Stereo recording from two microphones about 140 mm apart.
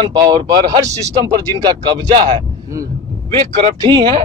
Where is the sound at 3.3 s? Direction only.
40° right (ahead or behind).